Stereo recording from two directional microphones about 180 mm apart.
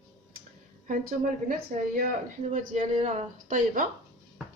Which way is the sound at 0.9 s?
50° right (ahead or behind).